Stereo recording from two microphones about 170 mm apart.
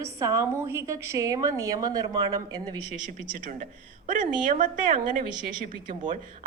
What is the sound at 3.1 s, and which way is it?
A woman's voice, 50° right (ahead or behind).